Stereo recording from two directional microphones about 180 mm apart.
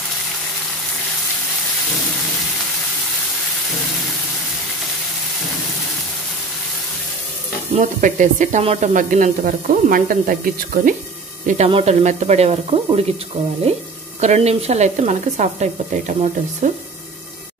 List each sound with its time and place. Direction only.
7.7 s speech: 45° right (ahead or behind)
11.4 s speech: 40° right (ahead or behind)